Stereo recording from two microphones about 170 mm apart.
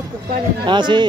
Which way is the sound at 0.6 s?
25° right (ahead or behind).